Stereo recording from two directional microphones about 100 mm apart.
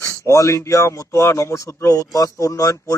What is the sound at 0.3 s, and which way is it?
Speech, 30° left (ahead or behind).